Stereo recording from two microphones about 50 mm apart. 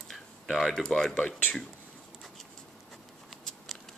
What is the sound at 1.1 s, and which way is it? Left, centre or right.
Speech, left.